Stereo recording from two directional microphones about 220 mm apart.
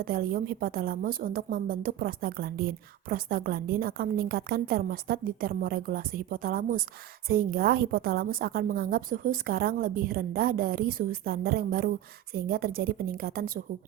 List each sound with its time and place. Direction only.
0.0 s a woman's voice: 40° right (ahead or behind)